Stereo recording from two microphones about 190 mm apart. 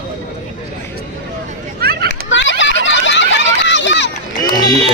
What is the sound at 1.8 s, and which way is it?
Children playing, 55° right (ahead or behind).